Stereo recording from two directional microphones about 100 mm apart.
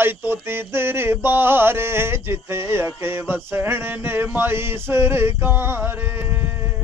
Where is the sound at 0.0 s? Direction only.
20° right (ahead or behind).